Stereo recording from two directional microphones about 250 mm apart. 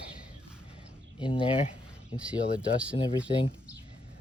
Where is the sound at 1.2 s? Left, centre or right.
Centre.